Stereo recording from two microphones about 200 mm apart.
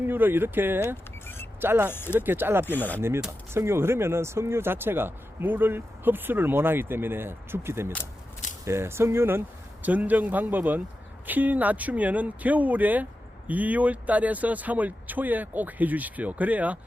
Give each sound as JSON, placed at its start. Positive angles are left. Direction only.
{"t": 0.0, "sound": "speech", "side_deg": -10}
{"t": 1.9, "sound": "speech", "side_deg": 10}
{"t": 2.1, "sound": "speech", "side_deg": -10}
{"t": 2.6, "sound": "speech", "side_deg": 10}
{"t": 3.0, "sound": "speech", "side_deg": -10}